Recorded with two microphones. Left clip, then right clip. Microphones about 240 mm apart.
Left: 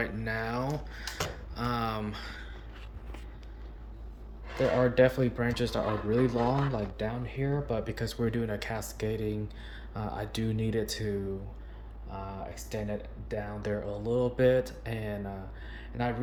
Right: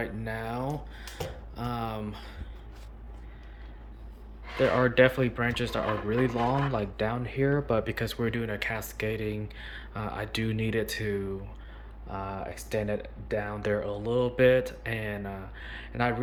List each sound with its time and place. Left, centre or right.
0.0 s speech: centre
4.7 s speech: centre
6.7 s speech: centre
12.3 s speech: centre